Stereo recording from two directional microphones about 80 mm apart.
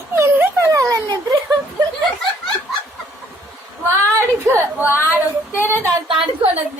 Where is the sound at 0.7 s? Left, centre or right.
Right.